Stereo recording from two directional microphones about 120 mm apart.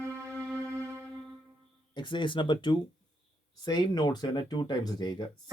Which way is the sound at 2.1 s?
45° left (ahead or behind).